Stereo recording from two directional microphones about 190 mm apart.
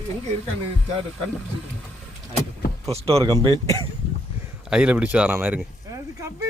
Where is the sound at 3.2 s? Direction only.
20° right (ahead or behind).